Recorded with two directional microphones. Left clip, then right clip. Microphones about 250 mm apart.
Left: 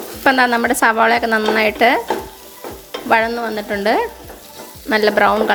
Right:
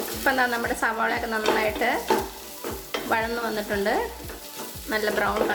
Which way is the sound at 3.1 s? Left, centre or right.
Left.